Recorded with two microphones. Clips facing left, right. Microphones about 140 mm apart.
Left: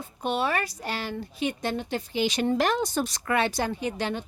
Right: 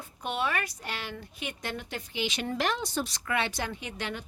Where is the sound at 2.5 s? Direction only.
45° left (ahead or behind).